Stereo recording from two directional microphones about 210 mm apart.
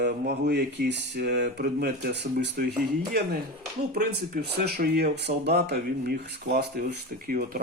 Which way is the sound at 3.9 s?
50° right (ahead or behind).